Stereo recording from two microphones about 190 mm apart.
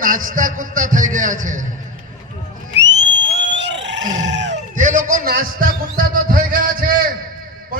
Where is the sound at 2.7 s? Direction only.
70° right (ahead or behind).